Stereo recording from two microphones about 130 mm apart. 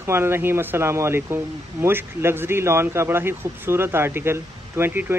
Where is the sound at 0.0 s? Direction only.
20° right (ahead or behind).